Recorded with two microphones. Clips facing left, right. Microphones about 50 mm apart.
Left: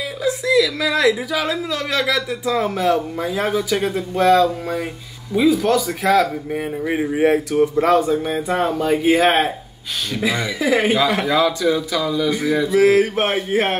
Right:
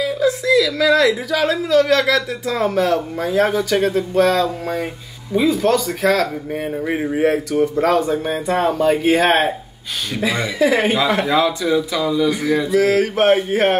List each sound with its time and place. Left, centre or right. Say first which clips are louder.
0.2 s a woman's voice: even; centre
7.2 s a woman's voice: left 1 dB; centre
8.3 s speech: right 1 dB; centre
12.4 s speech: right 1 dB; centre
12.7 s mantra: left 2 dB; left
13.0 s a woman's voice: right 5 dB; centre